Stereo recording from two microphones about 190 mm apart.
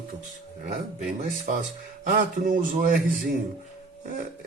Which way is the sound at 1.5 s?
40° right (ahead or behind).